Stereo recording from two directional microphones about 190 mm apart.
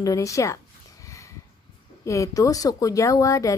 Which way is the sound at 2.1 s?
15° left (ahead or behind).